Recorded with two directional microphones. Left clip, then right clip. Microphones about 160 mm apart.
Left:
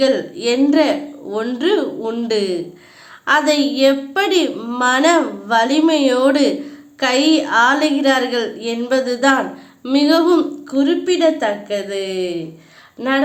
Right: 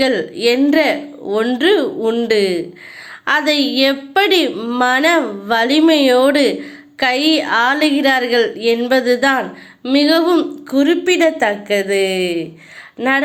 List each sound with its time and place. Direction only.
0.0 s a woman's voice: 25° right (ahead or behind)